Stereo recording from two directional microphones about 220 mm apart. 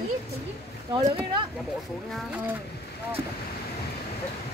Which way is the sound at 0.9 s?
15° right (ahead or behind).